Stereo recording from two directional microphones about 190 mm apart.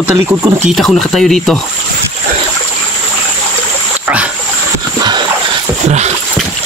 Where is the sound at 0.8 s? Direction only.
Centre (ahead or behind).